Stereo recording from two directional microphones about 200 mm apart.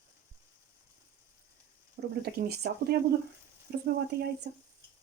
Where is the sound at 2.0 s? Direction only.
60° right (ahead or behind).